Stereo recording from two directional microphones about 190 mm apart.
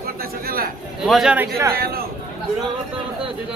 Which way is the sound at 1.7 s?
50° right (ahead or behind).